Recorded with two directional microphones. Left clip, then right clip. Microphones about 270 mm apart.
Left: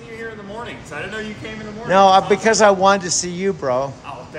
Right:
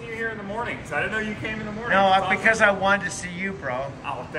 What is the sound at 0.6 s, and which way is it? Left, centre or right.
A man's voice, centre.